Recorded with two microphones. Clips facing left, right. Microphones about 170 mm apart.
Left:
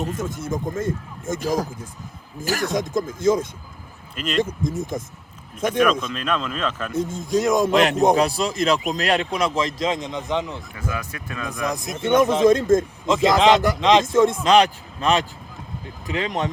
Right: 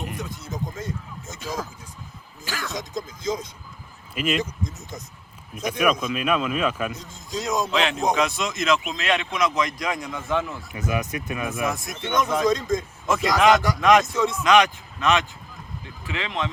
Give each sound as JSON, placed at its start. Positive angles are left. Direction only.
{"t": 0.2, "sound": "speech", "side_deg": 50}
{"t": 4.1, "sound": "speech", "side_deg": -5}
{"t": 5.8, "sound": "speech", "side_deg": -10}
{"t": 6.9, "sound": "a man's voice", "side_deg": 50}
{"t": 10.8, "sound": "speech", "side_deg": -20}
{"t": 11.7, "sound": "a man's voice", "side_deg": 20}
{"t": 11.9, "sound": "speech", "side_deg": 50}
{"t": 13.1, "sound": "a man's voice", "side_deg": 25}
{"t": 14.2, "sound": "speech", "side_deg": 50}
{"t": 14.4, "sound": "a man's voice", "side_deg": 35}